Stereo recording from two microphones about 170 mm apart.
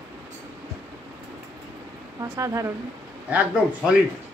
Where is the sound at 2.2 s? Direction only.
20° right (ahead or behind).